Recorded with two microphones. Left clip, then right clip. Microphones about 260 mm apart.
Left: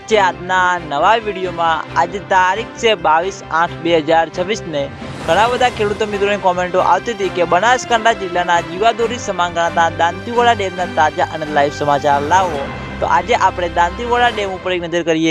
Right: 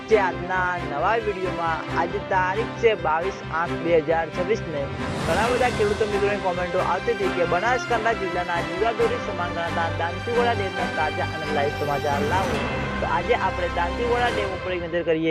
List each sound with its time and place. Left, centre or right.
0.1 s music: left
13.1 s speech: left